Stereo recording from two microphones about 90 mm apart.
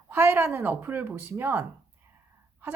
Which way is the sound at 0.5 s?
25° right (ahead or behind).